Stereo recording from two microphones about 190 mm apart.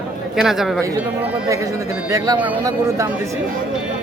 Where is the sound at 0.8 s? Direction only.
15° right (ahead or behind).